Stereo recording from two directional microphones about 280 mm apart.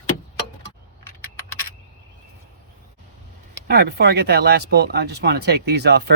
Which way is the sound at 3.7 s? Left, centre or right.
Right.